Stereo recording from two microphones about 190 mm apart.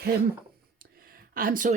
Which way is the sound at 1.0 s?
45° right (ahead or behind).